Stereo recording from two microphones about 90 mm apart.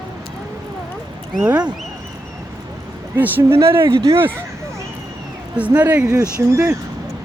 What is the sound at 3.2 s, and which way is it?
Speech, 25° right (ahead or behind).